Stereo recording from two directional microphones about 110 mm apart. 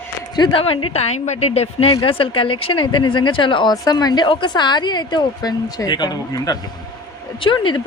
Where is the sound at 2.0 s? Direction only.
55° left (ahead or behind).